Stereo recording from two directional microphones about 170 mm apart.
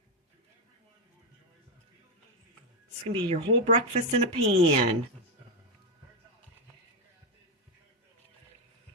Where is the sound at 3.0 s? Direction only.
35° right (ahead or behind).